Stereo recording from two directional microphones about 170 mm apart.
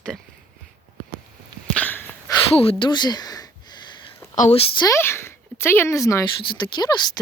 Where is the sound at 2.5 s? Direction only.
30° left (ahead or behind).